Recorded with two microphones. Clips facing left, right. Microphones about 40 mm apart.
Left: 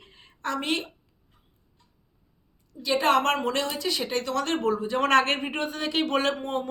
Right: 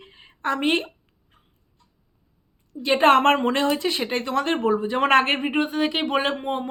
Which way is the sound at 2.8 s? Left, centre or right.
Right.